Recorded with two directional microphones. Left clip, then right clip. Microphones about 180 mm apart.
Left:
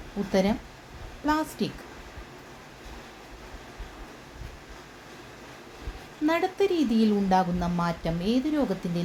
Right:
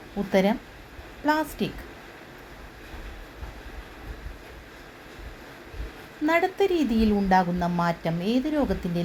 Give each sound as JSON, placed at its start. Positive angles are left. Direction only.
{"t": 0.3, "sound": "speech", "side_deg": -10}
{"t": 6.2, "sound": "speech", "side_deg": -10}